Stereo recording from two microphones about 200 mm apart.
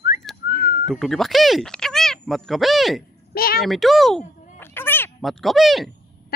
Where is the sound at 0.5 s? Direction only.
50° left (ahead or behind).